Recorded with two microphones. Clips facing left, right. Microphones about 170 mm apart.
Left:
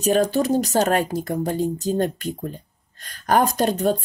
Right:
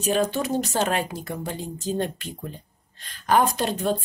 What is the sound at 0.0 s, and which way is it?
A woman's voice, 40° left (ahead or behind).